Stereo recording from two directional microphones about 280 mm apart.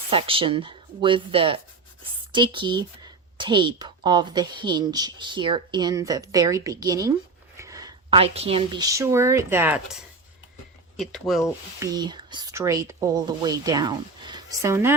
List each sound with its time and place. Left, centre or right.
0.1 s speech: centre
11.8 s speech: centre